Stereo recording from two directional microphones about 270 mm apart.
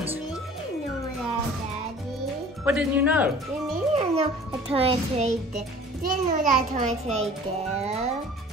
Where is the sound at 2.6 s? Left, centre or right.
Centre.